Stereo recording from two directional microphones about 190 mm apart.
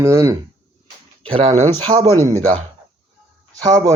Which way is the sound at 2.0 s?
15° right (ahead or behind).